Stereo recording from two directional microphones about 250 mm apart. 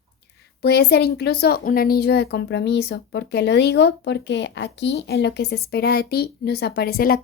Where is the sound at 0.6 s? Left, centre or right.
Left.